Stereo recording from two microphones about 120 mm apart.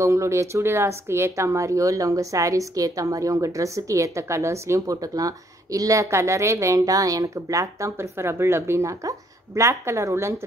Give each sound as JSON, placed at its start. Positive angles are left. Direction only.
{"t": 0.0, "sound": "speech", "side_deg": -25}